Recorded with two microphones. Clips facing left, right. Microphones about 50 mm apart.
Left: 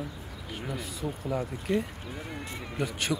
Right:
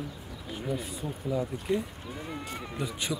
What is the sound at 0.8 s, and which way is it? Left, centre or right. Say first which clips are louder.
Speech: right 1 dB; left.